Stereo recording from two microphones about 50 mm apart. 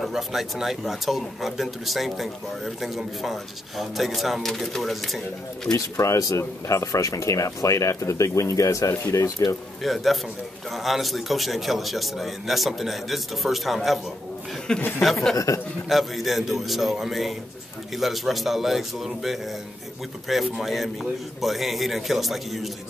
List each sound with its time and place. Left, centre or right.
0.1 s speech: centre
5.8 s speech: left
9.8 s speech: centre
14.7 s speech: centre
15.3 s speech: left
15.9 s speech: centre